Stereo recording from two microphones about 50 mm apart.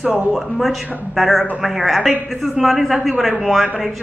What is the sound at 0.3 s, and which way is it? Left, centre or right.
Speech, centre.